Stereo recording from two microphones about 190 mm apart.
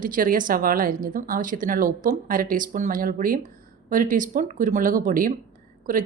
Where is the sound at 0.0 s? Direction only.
45° right (ahead or behind).